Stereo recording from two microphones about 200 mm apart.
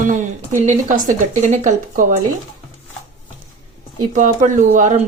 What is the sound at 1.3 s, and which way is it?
Speech, 35° right (ahead or behind).